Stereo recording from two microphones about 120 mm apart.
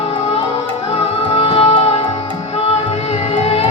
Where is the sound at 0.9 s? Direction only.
55° left (ahead or behind).